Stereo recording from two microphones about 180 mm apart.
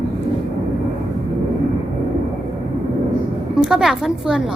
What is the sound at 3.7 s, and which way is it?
Speech, 5° right (ahead or behind).